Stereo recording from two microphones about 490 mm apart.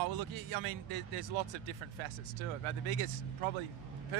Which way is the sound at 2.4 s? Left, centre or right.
Right.